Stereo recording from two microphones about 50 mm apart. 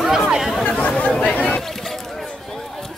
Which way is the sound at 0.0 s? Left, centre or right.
Centre.